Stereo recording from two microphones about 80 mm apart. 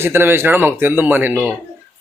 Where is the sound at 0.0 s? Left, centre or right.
Right.